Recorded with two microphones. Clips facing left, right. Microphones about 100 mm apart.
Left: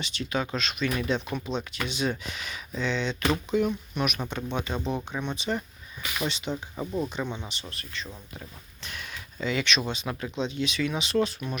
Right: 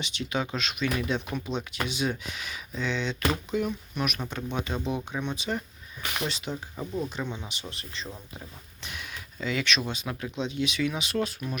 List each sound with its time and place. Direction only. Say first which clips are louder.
0.0 s speech: left 1 dB; 15° right (ahead or behind)
6.7 s speech: left 1 dB; 10° left (ahead or behind)
7.1 s speech: left 2 dB; centre (ahead or behind)
7.7 s speech: even; 25° right (ahead or behind)
8.8 s a sound: even; 10° right (ahead or behind)
9.4 s speech: left 1 dB; centre (ahead or behind)